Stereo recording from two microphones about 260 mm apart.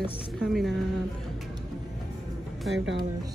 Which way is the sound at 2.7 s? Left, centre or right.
Right.